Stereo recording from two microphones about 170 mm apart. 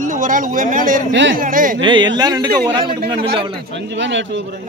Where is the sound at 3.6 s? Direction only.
90° right.